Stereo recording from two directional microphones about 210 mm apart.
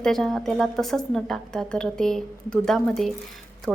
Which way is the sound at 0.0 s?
Centre (ahead or behind).